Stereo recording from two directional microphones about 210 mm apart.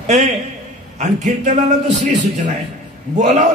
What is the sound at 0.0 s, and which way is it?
A man's voice, 30° right (ahead or behind).